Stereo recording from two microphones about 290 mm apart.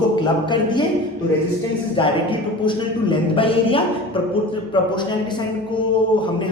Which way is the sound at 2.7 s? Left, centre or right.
Centre.